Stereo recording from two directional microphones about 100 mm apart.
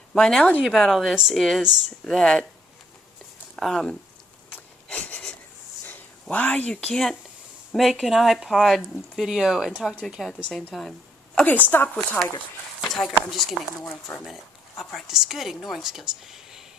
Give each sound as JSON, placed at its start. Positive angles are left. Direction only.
{"t": 0.1, "sound": "speech", "side_deg": 5}
{"t": 2.1, "sound": "speech", "side_deg": 10}
{"t": 3.5, "sound": "speech", "side_deg": 5}
{"t": 4.5, "sound": "a sound", "side_deg": 15}
{"t": 6.2, "sound": "speech", "side_deg": 15}
{"t": 11.4, "sound": "speech", "side_deg": 20}
{"t": 12.9, "sound": "speech", "side_deg": 5}
{"t": 14.3, "sound": "a sound", "side_deg": 0}
{"t": 14.9, "sound": "speech", "side_deg": -5}